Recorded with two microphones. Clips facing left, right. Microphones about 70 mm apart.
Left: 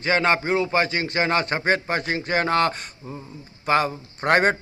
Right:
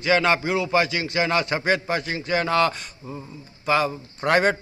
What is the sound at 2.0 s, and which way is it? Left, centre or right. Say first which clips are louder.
A man's voice: left 1 dB; left.